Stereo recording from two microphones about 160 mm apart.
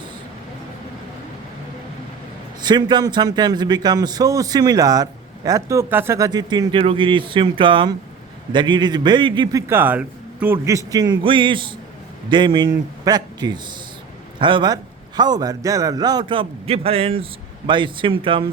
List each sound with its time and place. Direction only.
2.6 s a man's voice: 25° right (ahead or behind)